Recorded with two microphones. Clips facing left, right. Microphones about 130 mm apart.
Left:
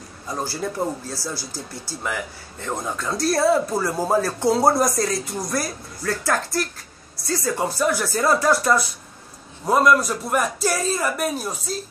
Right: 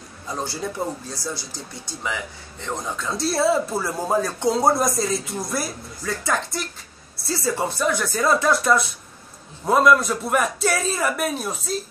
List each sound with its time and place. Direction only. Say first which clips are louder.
0.3 s speech: left 1 dB; centre (ahead or behind)
1.3 s speech: left 2 dB; 20° right (ahead or behind)
2.6 s speech: left 1 dB; 5° left (ahead or behind)